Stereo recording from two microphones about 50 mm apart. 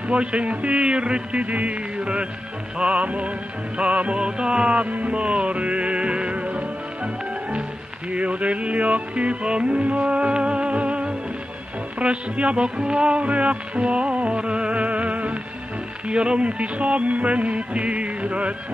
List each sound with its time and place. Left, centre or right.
0.1 s music: right
8.1 s music: right